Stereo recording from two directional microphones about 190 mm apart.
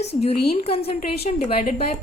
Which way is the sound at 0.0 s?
35° left (ahead or behind).